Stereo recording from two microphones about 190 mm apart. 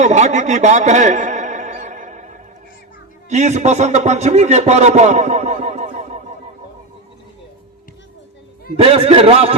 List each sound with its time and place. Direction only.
0.0 s music: 40° right (ahead or behind)
3.2 s a man's voice: 35° right (ahead or behind)
8.7 s a man's voice: 30° right (ahead or behind)